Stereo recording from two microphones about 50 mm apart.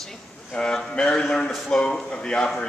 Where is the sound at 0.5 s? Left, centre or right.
Centre.